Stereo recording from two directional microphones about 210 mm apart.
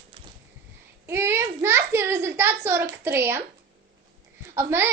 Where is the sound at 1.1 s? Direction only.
10° right (ahead or behind).